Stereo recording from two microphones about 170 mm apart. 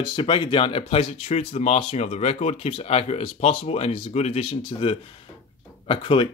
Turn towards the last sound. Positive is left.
turn(degrees=30)  # may be behind; listen again after turning